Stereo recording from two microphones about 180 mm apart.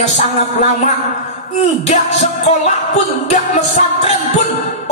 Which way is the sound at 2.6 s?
40° left (ahead or behind).